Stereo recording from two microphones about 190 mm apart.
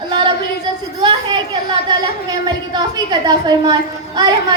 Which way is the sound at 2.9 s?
20° right (ahead or behind).